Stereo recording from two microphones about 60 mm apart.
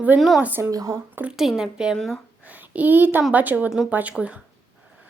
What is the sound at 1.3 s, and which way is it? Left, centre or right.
Speech, centre.